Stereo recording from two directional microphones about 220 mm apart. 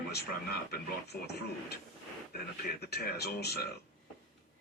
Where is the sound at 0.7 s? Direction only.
45° left (ahead or behind).